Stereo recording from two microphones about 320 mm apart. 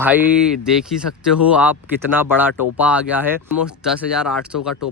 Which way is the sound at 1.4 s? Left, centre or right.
Centre.